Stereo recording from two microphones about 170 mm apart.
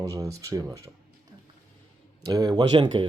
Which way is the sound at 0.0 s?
20° right (ahead or behind).